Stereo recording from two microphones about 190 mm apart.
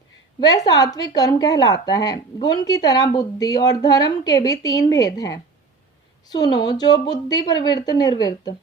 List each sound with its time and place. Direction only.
0.3 s a woman's voice: 20° left (ahead or behind)